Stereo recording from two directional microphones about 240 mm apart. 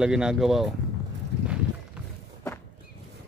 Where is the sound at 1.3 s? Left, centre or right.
Right.